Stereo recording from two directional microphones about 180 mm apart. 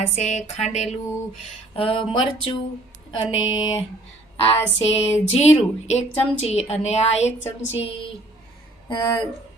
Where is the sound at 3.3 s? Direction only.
90° left.